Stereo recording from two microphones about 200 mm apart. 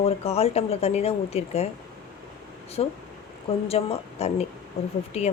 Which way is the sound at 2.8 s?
30° left (ahead or behind).